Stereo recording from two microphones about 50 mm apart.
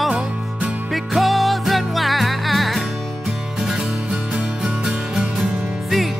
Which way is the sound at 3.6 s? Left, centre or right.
Centre.